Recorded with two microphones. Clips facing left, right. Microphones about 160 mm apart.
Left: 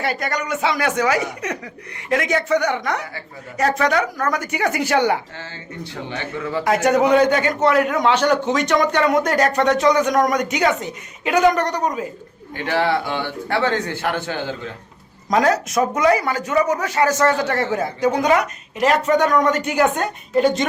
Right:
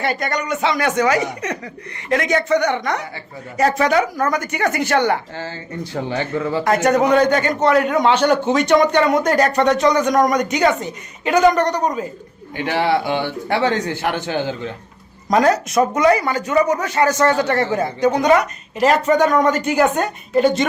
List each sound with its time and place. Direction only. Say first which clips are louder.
0.0 s speech: right 2 dB; 5° left (ahead or behind)
4.4 s a man's voice: right 1 dB; 10° left (ahead or behind)
5.4 s speech: right 5 dB; 40° right (ahead or behind)
6.7 s a man's voice: even; 10° left (ahead or behind)
8.5 s speech: right 4 dB; 30° right (ahead or behind)
8.9 s speech: right 2 dB; centre (ahead or behind)
12.6 s a man's voice: right 2 dB; 15° right (ahead or behind)
15.3 s speech: right 2 dB; centre (ahead or behind)